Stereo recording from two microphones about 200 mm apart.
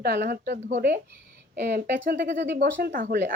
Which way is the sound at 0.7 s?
40° right (ahead or behind).